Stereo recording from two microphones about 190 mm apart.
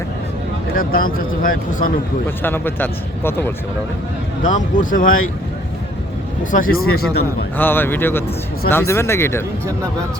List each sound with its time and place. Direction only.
0.8 s speech: 50° left (ahead or behind)
2.4 s speech: 10° left (ahead or behind)
4.4 s speech: 45° left (ahead or behind)
6.5 s speech: 50° left (ahead or behind)
7.5 s speech: 10° left (ahead or behind)